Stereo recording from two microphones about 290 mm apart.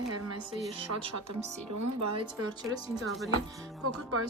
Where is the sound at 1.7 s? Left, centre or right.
Right.